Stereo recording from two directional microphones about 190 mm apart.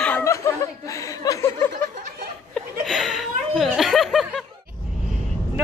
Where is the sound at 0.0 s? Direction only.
10° left (ahead or behind).